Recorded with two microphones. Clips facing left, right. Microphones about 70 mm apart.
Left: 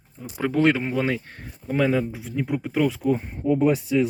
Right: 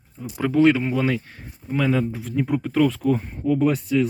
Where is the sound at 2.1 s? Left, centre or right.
Centre.